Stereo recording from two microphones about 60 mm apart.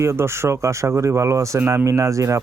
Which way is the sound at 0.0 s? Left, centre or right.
Right.